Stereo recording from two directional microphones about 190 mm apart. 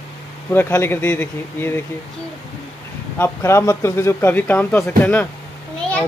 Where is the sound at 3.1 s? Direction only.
15° left (ahead or behind).